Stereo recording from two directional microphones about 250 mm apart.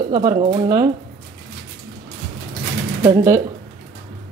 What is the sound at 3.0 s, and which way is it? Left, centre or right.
Speech, centre.